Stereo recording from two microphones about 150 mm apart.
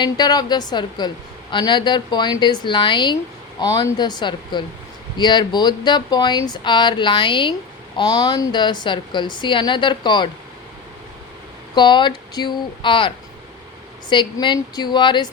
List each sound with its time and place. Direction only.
0.0 s a woman's voice: 30° left (ahead or behind)
11.7 s a woman's voice: 30° left (ahead or behind)